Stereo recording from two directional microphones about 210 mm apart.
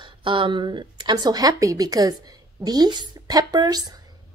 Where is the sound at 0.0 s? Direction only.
25° right (ahead or behind).